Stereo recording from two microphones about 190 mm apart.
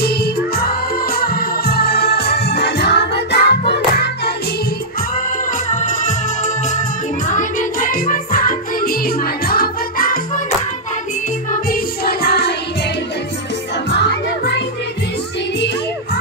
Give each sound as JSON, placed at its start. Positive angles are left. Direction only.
{"t": 0.0, "sound": "music", "side_deg": 55}
{"t": 5.7, "sound": "music", "side_deg": 40}
{"t": 11.5, "sound": "music", "side_deg": 50}
{"t": 13.8, "sound": "music", "side_deg": 65}